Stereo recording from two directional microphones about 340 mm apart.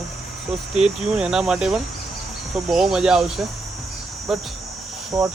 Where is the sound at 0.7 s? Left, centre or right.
Centre.